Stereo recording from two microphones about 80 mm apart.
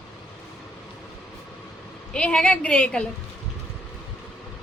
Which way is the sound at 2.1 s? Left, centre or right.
Centre.